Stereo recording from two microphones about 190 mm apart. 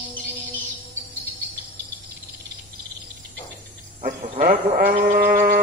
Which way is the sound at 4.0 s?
45° right (ahead or behind).